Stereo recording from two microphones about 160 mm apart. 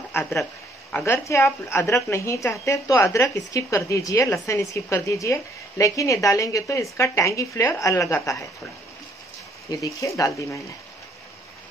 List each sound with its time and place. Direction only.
0.1 s a woman's voice: 15° left (ahead or behind)
9.7 s a woman's voice: 20° left (ahead or behind)